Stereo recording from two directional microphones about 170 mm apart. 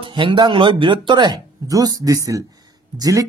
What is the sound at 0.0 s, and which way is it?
A woman's voice, 25° right (ahead or behind).